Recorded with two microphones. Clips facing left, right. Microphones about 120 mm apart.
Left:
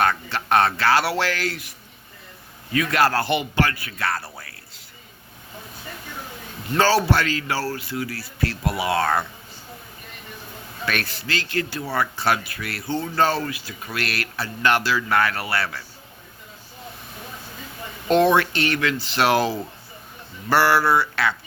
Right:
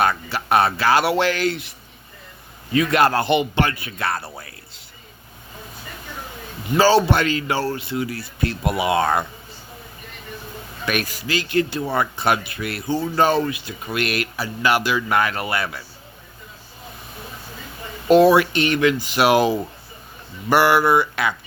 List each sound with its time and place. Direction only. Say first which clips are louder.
0.0 s speech: right 1 dB; 10° right (ahead or behind)
2.7 s speech: right 3 dB; 20° right (ahead or behind)
6.8 s speech: right 4 dB; 20° right (ahead or behind)
10.8 s speech: right 3 dB; 15° right (ahead or behind)
18.1 s speech: right 4 dB; 5° right (ahead or behind)
18.5 s speech: right 5 dB; 20° right (ahead or behind)